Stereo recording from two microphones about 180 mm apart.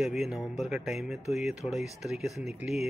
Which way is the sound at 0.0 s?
Centre (ahead or behind).